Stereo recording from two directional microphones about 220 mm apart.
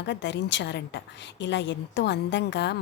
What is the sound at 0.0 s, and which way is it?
A woman's voice, 55° left (ahead or behind).